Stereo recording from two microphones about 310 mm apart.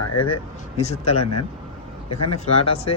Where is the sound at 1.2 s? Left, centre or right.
Left.